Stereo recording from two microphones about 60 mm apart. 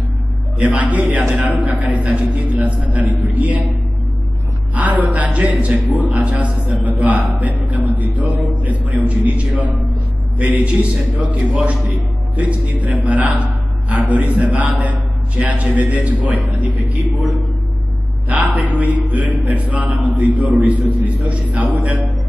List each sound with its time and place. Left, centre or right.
0.6 s a man's voice: right
4.7 s a man's voice: right
10.3 s a man's voice: right
18.3 s a man's voice: right